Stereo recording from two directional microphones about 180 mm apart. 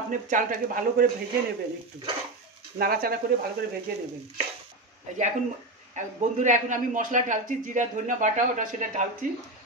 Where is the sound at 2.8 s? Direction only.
55° right (ahead or behind).